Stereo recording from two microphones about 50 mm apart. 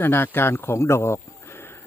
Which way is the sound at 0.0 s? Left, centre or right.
Left.